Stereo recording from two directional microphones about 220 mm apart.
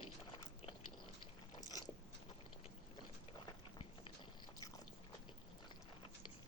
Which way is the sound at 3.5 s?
25° left (ahead or behind).